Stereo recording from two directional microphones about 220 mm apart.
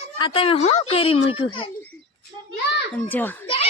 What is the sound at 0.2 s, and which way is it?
A child's voice, 25° left (ahead or behind).